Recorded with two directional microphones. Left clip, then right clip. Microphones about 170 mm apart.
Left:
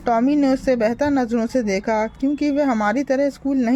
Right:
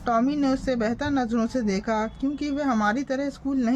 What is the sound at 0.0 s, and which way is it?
A woman's voice, 35° left (ahead or behind).